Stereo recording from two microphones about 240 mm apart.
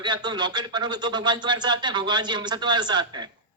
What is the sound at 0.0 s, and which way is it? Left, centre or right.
A man's voice, centre.